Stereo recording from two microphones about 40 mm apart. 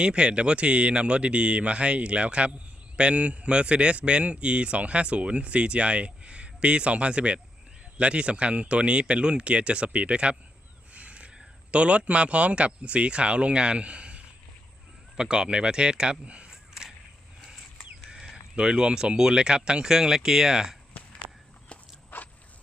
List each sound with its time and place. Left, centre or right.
0.0 s speech: right
10.9 s crow: right
11.7 s speech: right
16.5 s a sound: centre
18.5 s speech: centre
22.1 s biting: left